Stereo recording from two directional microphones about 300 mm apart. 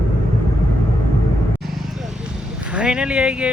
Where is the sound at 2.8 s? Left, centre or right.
Centre.